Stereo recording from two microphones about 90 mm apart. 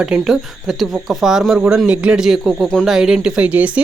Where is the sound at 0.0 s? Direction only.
5° right (ahead or behind).